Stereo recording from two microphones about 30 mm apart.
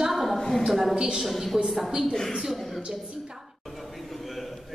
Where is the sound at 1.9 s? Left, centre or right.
Right.